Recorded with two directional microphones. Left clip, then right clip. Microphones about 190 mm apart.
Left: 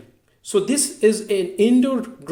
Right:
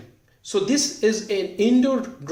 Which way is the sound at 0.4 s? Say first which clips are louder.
Left 1 dB; 40° left (ahead or behind).